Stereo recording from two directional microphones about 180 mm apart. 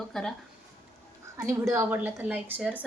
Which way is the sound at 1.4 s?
15° right (ahead or behind).